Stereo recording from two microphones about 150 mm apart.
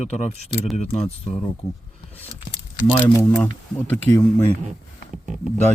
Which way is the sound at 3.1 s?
20° left (ahead or behind).